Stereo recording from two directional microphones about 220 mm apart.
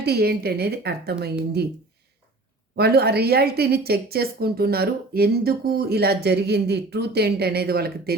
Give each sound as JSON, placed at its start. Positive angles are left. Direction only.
{"t": 0.0, "sound": "a woman's voice", "side_deg": -45}
{"t": 2.7, "sound": "a woman's voice", "side_deg": -45}